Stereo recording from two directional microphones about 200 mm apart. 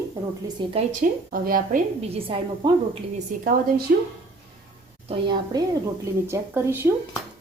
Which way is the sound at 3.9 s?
50° right (ahead or behind).